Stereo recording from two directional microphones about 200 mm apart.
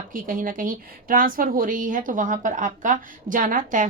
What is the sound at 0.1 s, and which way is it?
A woman's voice, 45° right (ahead or behind).